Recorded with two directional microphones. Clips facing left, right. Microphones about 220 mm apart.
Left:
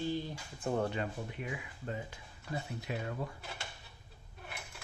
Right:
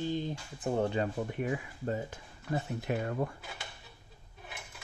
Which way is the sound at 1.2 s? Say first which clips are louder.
Right 8 dB; 45° right (ahead or behind).